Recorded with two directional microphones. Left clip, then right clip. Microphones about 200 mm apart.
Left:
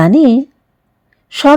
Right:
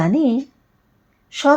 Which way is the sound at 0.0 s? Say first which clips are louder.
Left 9 dB; 50° left (ahead or behind).